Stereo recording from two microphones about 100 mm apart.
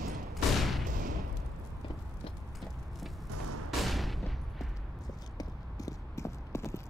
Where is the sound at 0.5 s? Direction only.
Centre (ahead or behind).